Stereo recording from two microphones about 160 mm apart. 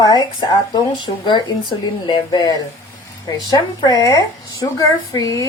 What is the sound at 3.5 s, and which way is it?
A woman's voice, 25° left (ahead or behind).